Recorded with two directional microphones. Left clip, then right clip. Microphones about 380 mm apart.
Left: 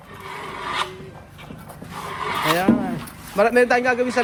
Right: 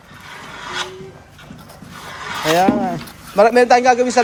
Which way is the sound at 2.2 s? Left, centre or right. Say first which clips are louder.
Left 1 dB; centre.